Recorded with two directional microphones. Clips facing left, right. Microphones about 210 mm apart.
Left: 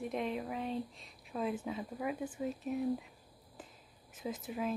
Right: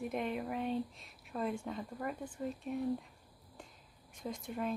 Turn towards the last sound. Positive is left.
turn(degrees=5)  # may be behind; listen again after turning